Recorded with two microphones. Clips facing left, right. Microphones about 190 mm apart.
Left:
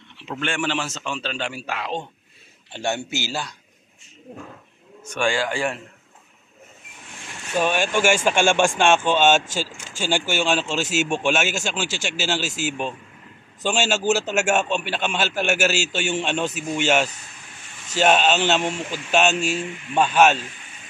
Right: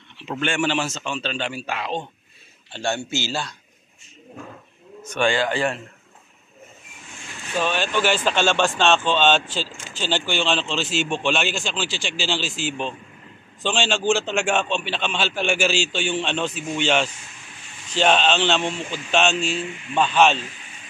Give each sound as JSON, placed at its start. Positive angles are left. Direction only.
{"t": 0.4, "sound": "a man's voice", "side_deg": 0}
{"t": 2.7, "sound": "a man's voice", "side_deg": 20}
{"t": 5.0, "sound": "a man's voice", "side_deg": 10}
{"t": 7.5, "sound": "a man's voice", "side_deg": 10}
{"t": 10.8, "sound": "a man's voice", "side_deg": 45}
{"t": 11.1, "sound": "a man's voice", "side_deg": 10}